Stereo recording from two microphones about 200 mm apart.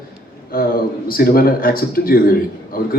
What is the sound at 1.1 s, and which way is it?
A man's voice, 45° left (ahead or behind).